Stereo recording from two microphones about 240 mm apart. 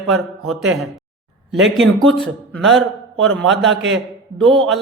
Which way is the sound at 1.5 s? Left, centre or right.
Centre.